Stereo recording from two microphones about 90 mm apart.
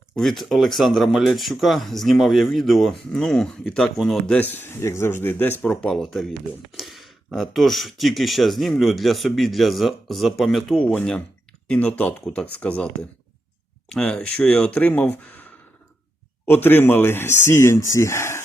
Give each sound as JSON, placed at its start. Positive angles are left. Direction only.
{"t": 0.2, "sound": "speech", "side_deg": 0}
{"t": 4.3, "sound": "speech", "side_deg": 20}
{"t": 5.9, "sound": "speech", "side_deg": 0}
{"t": 16.5, "sound": "speech", "side_deg": 25}